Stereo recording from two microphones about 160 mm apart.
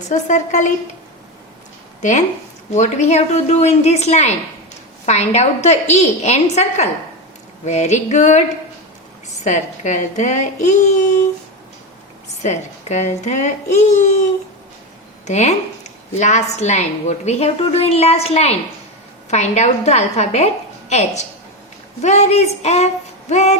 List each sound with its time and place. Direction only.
0.1 s a woman's voice: 50° left (ahead or behind)
2.0 s a woman's voice: 50° left (ahead or behind)
12.4 s a woman's voice: 45° left (ahead or behind)
15.3 s a woman's voice: 45° left (ahead or behind)
22.0 s a woman's voice: 45° left (ahead or behind)